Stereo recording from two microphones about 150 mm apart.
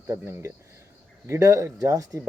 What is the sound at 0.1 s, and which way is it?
Speech, 20° right (ahead or behind).